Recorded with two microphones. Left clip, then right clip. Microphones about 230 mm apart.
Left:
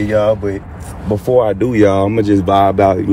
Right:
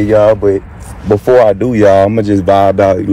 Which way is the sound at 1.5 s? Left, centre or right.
Centre.